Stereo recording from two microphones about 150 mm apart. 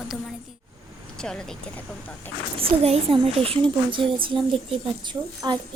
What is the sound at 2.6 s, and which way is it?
A woman's voice, 40° right (ahead or behind).